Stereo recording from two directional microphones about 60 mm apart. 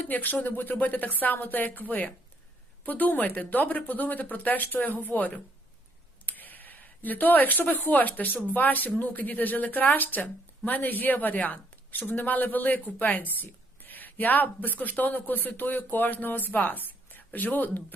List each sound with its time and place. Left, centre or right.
0.0 s a woman's voice: left